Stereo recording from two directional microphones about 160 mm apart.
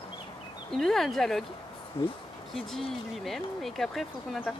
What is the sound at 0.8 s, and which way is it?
Speech, centre (ahead or behind).